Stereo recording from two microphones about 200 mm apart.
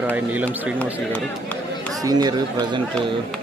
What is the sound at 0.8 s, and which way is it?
Run, 5° left (ahead or behind).